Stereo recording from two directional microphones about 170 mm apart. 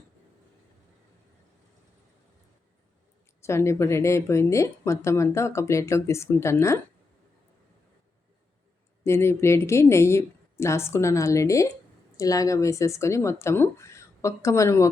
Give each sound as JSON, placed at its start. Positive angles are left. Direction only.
{"t": 3.4, "sound": "speech", "side_deg": 15}
{"t": 9.0, "sound": "speech", "side_deg": 15}